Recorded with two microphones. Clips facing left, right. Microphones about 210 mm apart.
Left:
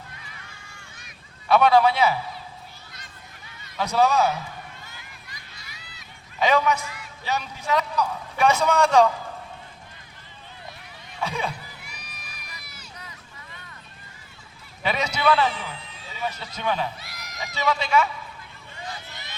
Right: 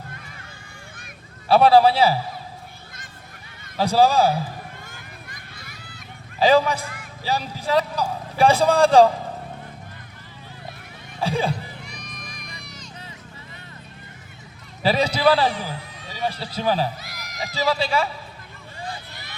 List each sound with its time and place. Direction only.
1.5 s speech: 35° right (ahead or behind)
3.8 s speech: 30° right (ahead or behind)
4.8 s a sound: 50° right (ahead or behind)
6.4 s speech: 30° right (ahead or behind)
6.8 s music: 50° right (ahead or behind)
7.3 s speech: 30° right (ahead or behind)
11.2 s speech: 30° right (ahead or behind)
11.8 s sheep: 5° left (ahead or behind)
14.8 s a man's voice: 35° right (ahead or behind)
17.0 s a sound: centre (ahead or behind)
17.7 s speech: 35° right (ahead or behind)